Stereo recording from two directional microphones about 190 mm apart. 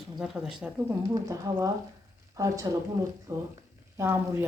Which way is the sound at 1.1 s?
15° right (ahead or behind).